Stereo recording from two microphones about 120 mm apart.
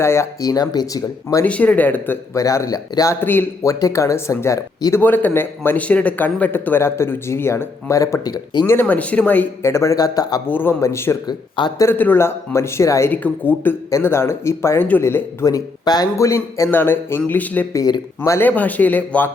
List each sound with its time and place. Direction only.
0.0 s speech: 20° left (ahead or behind)
1.5 s speech: 10° left (ahead or behind)
2.4 s speech: 25° left (ahead or behind)
3.2 s speech: 15° left (ahead or behind)
3.7 s speech: 30° left (ahead or behind)
8.6 s speech: 20° left (ahead or behind)
10.5 s speech: 15° left (ahead or behind)
11.3 s speech: 40° left (ahead or behind)
11.8 s speech: 20° left (ahead or behind)
17.7 s speech: 35° left (ahead or behind)
18.2 s speech: 15° left (ahead or behind)